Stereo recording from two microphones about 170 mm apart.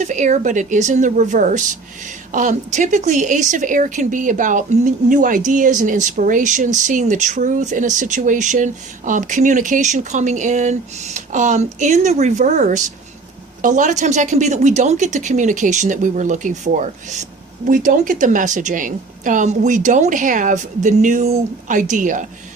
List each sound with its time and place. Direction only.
0.0 s speech: 45° right (ahead or behind)